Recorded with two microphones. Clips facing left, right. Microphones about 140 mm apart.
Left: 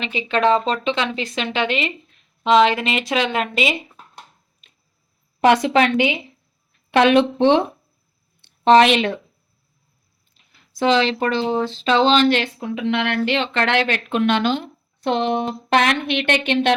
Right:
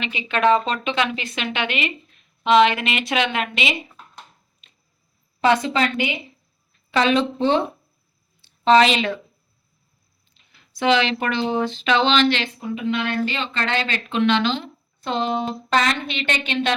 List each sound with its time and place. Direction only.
0.0 s speech: 35° left (ahead or behind)
5.6 s a woman's voice: 85° left
6.9 s speech: 60° left (ahead or behind)
8.4 s a sound: 60° left (ahead or behind)
10.8 s speech: 35° left (ahead or behind)
12.5 s speech: 90° left; by 16.7 s 60° left (ahead or behind)